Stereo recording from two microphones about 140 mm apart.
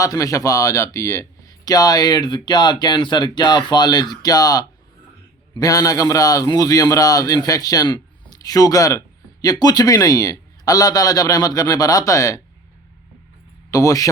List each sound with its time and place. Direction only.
0.0 s a man's voice: 25° left (ahead or behind)
13.7 s a man's voice: 25° left (ahead or behind)